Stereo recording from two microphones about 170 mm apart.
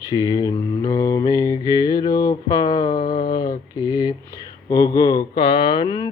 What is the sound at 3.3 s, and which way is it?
Mantra, 25° left (ahead or behind).